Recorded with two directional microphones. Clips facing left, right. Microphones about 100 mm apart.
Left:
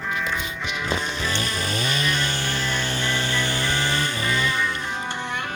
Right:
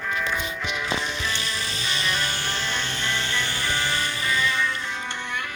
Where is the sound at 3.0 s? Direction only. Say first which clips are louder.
Left 3 dB; 10° left (ahead or behind).